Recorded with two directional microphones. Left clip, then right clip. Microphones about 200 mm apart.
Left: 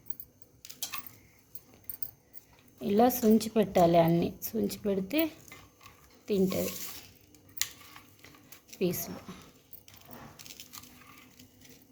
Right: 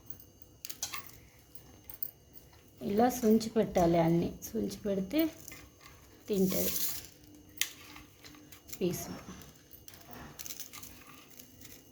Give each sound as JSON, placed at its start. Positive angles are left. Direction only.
{"t": 2.8, "sound": "a woman's voice", "side_deg": 25}
{"t": 8.8, "sound": "a woman's voice", "side_deg": 20}